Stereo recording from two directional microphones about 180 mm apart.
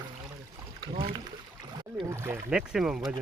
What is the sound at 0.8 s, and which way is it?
Speech, 25° right (ahead or behind).